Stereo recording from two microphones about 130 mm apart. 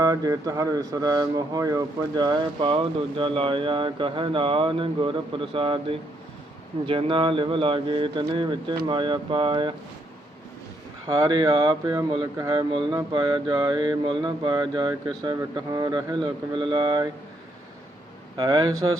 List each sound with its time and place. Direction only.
0.0 s speech: 30° right (ahead or behind)
11.1 s speech: 30° right (ahead or behind)
18.3 s speech: 30° right (ahead or behind)